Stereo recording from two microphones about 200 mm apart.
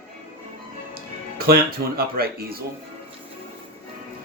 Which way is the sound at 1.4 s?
50° right (ahead or behind).